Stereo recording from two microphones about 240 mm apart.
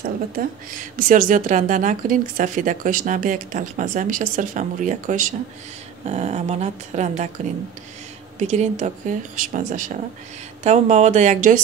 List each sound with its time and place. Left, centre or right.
0.9 s a woman's voice: right
8.4 s a woman's voice: right